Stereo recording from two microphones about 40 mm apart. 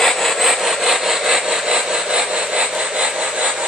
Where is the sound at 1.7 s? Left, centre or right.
Centre.